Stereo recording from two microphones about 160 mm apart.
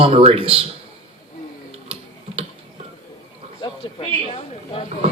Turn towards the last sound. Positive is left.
turn(degrees=40)  # may be behind; listen again after turning